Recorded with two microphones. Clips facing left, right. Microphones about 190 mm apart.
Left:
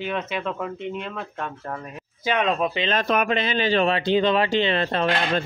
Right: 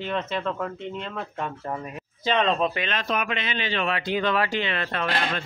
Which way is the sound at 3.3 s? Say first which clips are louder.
Left 7 dB; 35° left (ahead or behind).